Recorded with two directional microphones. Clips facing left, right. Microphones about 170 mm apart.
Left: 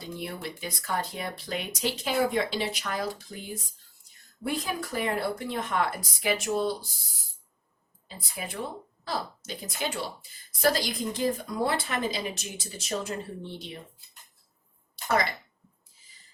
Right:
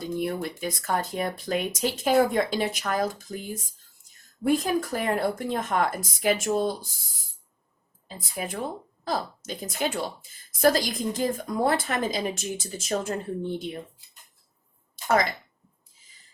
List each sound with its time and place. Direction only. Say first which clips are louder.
0.2 s a woman's voice: right 7 dB; 45° right (ahead or behind)
8.0 s a woman's voice: right 5 dB; 45° right (ahead or behind)